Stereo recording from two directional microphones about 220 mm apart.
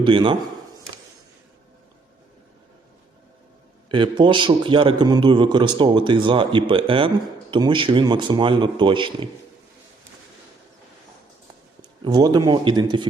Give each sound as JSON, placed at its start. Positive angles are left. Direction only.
{"t": 0.0, "sound": "a man's voice", "side_deg": -20}
{"t": 3.8, "sound": "a man's voice", "side_deg": -20}
{"t": 11.8, "sound": "speech", "side_deg": -20}